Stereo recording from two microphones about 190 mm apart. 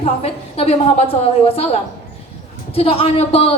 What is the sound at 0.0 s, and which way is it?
A woman's voice, 30° left (ahead or behind).